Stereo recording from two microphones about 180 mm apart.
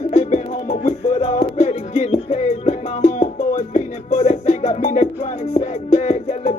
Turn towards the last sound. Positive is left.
turn(degrees=40)  # may be behind; listen again after turning